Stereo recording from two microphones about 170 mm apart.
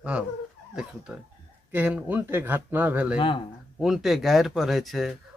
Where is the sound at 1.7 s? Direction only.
10° right (ahead or behind).